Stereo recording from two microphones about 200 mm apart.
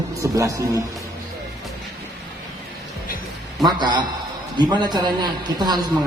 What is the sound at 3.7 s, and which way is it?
A man's voice, 20° right (ahead or behind).